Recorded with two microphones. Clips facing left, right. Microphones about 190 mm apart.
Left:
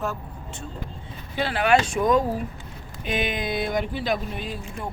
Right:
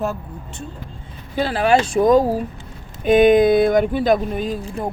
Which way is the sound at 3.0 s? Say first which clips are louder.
Right 15 dB; 50° right (ahead or behind).